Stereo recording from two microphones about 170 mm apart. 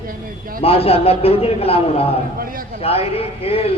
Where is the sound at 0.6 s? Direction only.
35° left (ahead or behind).